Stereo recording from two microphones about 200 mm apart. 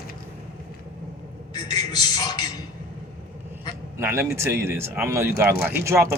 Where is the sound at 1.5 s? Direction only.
20° left (ahead or behind).